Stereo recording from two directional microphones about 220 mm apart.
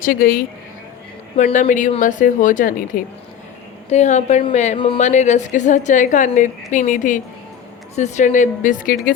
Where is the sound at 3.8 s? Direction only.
30° left (ahead or behind).